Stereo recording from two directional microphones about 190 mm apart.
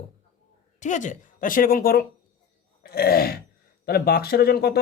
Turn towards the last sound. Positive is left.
turn(degrees=55)  # may be behind; listen again after turning